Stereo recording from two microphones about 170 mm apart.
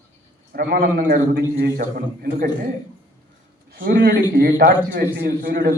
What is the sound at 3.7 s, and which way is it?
A man's voice, 60° right (ahead or behind).